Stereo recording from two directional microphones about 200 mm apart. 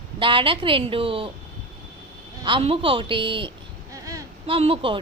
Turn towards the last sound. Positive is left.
turn(degrees=-25)  # may be behind; listen again after turning